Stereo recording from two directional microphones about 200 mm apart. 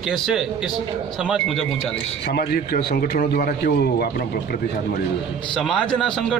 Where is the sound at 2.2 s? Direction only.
50° left (ahead or behind).